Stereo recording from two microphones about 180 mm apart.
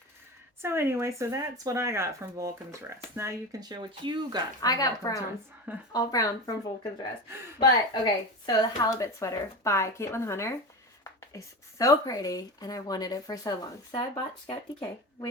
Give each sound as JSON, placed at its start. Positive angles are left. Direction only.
{"t": 0.6, "sound": "speech", "side_deg": -15}
{"t": 4.6, "sound": "speech", "side_deg": 20}
{"t": 7.6, "sound": "a woman's voice", "side_deg": 20}